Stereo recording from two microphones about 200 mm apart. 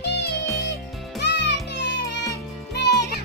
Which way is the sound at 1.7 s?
60° left (ahead or behind).